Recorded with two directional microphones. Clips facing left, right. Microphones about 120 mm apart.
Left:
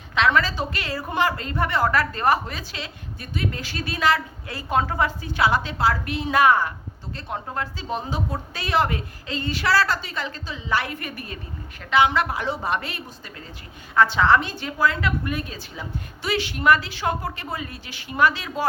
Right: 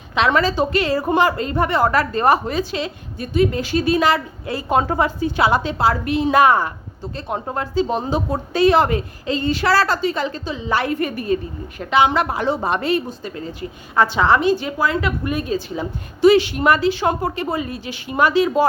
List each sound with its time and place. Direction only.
0.1 s a woman's voice: 20° right (ahead or behind)